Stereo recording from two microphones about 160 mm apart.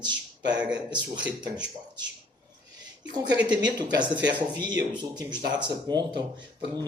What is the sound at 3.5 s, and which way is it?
Speech, 25° right (ahead or behind).